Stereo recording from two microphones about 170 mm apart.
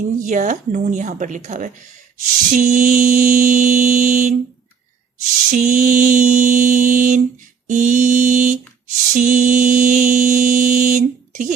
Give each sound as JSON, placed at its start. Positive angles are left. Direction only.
{"t": 0.2, "sound": "a woman's voice", "side_deg": -50}
{"t": 2.2, "sound": "mantra", "side_deg": -50}